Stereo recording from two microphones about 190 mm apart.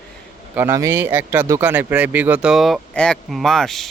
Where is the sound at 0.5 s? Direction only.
10° right (ahead or behind).